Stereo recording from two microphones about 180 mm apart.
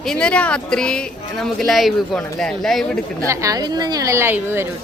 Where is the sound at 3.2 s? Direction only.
20° right (ahead or behind).